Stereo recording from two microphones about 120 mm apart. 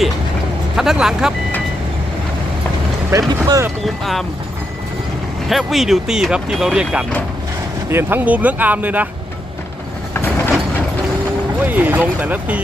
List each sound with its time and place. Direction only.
0.8 s speech: 5° right (ahead or behind)
3.1 s speech: 30° right (ahead or behind)
3.8 s speech: centre (ahead or behind)
5.5 s speech: centre (ahead or behind)
7.9 s speech: 20° right (ahead or behind)
11.6 s speech: 15° right (ahead or behind)